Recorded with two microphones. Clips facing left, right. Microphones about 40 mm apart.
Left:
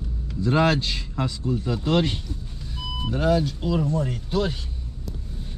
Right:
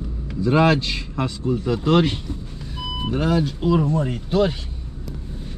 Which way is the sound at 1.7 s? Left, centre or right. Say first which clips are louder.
Right 5 dB; centre.